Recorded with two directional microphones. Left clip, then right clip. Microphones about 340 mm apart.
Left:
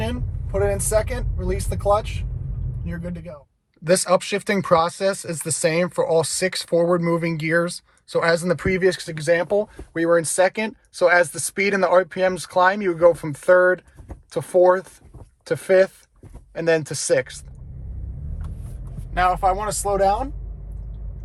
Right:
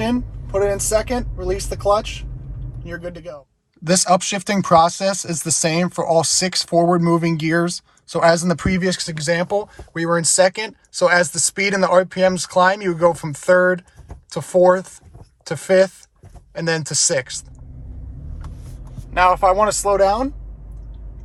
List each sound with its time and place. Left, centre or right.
0.5 s vehicle: right
1.4 s speech: right
3.8 s speech: centre
19.1 s speech: right